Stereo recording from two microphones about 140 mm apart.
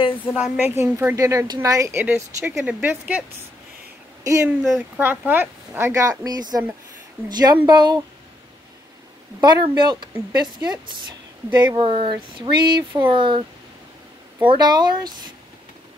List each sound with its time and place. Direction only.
0.4 s a woman's voice: 10° right (ahead or behind)
4.2 s speech: 20° right (ahead or behind)
4.5 s a woman's voice: 5° right (ahead or behind); by 8.0 s 30° right (ahead or behind)
9.4 s speech: 30° right (ahead or behind)
14.4 s speech: 35° right (ahead or behind)